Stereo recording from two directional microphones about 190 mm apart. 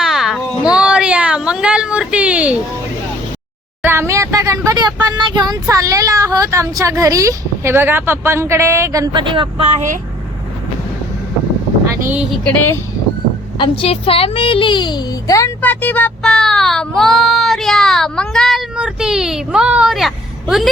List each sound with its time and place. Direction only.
0.0 s a sound: centre (ahead or behind)
3.8 s vehicle: 15° right (ahead or behind)
5.1 s speech: 20° right (ahead or behind)
12.0 s a woman's voice: 5° right (ahead or behind)
13.6 s a woman's voice: 30° left (ahead or behind); by 20.7 s centre (ahead or behind)